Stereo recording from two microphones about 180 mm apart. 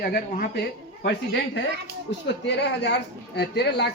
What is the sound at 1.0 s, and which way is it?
A woman's voice, 75° left (ahead or behind).